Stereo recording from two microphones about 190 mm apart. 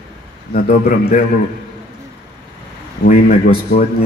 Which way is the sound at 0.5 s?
50° left (ahead or behind).